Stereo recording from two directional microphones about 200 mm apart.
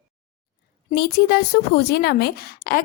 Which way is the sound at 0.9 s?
50° left (ahead or behind).